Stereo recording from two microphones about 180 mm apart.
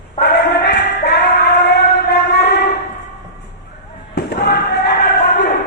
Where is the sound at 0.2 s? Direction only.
65° left (ahead or behind).